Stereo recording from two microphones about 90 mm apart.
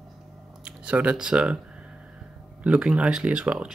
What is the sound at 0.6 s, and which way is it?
Speech, 15° right (ahead or behind).